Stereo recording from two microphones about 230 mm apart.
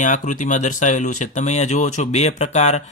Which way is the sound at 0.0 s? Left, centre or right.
Left.